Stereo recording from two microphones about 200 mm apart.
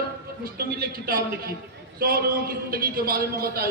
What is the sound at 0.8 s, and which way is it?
A man's voice, 45° right (ahead or behind).